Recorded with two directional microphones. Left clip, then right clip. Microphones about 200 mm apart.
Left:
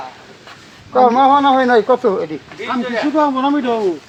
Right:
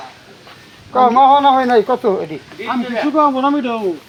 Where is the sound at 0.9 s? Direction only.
15° right (ahead or behind).